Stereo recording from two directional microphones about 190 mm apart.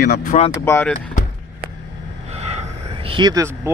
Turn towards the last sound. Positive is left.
turn(degrees=-15)  # may be behind; listen again after turning